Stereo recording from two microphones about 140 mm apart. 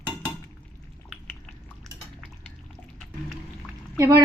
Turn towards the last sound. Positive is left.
turn(degrees=-25)  # may be behind; listen again after turning